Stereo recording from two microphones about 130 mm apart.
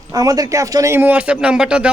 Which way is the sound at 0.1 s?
25° right (ahead or behind).